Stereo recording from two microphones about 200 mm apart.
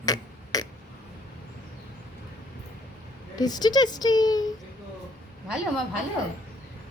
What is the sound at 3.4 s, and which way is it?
Speech, 20° left (ahead or behind).